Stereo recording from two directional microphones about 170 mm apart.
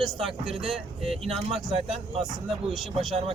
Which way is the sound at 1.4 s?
35° right (ahead or behind).